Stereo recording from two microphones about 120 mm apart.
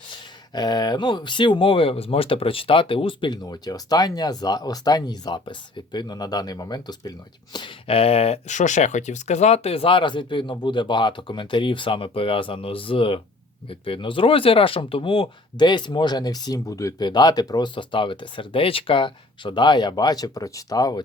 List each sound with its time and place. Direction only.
0.5 s speech: 35° left (ahead or behind)